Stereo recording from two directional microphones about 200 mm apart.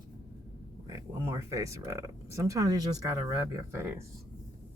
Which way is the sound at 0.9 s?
15° right (ahead or behind).